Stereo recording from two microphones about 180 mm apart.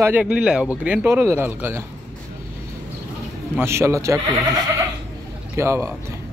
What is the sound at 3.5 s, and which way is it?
Speech, 15° right (ahead or behind).